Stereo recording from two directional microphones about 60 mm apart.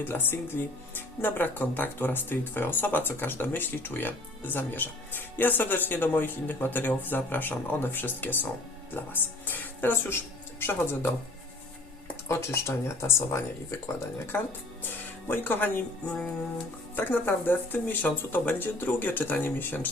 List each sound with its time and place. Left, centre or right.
0.0 s speech: left
9.5 s speech: left
12.3 s speech: left
15.3 s speech: left